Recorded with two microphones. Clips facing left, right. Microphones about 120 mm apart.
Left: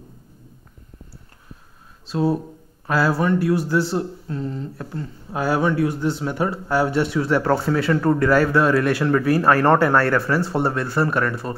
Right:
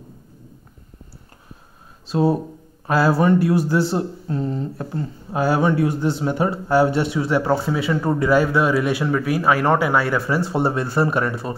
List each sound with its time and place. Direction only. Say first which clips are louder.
2.0 s speech: right 2 dB; 15° right (ahead or behind)
5.3 s speech: right 2 dB; 5° right (ahead or behind)